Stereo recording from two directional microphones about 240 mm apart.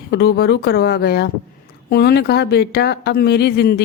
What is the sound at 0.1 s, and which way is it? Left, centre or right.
Speech, left.